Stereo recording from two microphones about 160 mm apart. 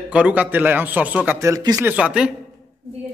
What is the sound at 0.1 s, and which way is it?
A man's voice, 10° right (ahead or behind).